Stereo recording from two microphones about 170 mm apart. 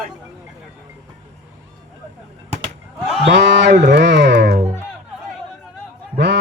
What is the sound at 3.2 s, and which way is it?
Speech, 90° right.